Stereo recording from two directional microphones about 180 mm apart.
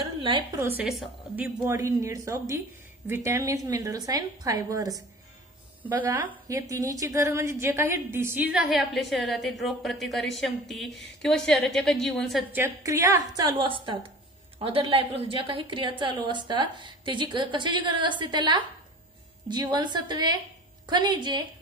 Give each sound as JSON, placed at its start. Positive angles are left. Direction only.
{"t": 0.2, "sound": "a woman's voice", "side_deg": -25}
{"t": 0.6, "sound": "a woman's voice", "side_deg": -10}
{"t": 12.5, "sound": "a woman's voice", "side_deg": -15}